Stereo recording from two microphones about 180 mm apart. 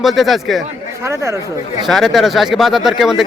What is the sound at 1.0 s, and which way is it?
Speech, 15° right (ahead or behind).